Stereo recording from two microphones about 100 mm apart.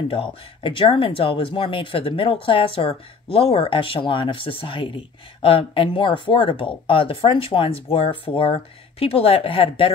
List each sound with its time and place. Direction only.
0.6 s speech: 60° left (ahead or behind)